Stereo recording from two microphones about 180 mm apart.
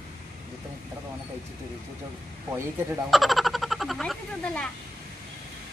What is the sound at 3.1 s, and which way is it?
Speech, centre (ahead or behind).